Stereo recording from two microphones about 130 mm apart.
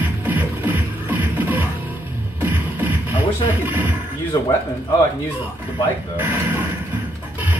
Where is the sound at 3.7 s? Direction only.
15° right (ahead or behind).